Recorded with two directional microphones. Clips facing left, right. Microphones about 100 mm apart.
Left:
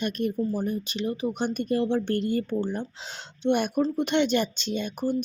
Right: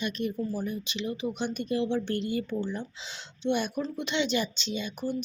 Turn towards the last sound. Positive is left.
turn(degrees=50)  # may be behind; listen again after turning